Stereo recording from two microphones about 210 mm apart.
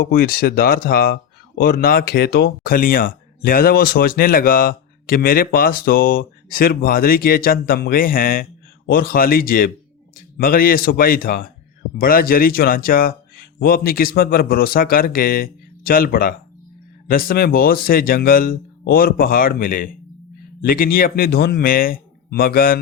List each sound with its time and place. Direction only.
0.0 s speech: 45° left (ahead or behind)